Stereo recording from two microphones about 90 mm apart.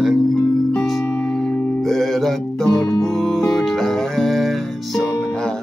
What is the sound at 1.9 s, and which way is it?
Music, 5° left (ahead or behind).